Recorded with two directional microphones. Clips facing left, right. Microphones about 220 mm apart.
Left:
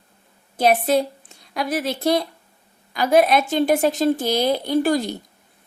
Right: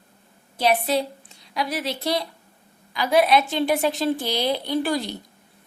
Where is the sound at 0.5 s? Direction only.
50° left (ahead or behind).